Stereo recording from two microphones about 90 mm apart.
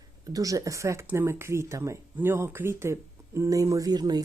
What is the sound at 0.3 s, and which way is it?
Speech, 40° right (ahead or behind).